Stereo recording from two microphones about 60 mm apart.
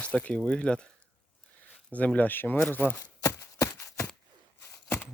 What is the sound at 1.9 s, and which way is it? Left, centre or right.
Speech, left.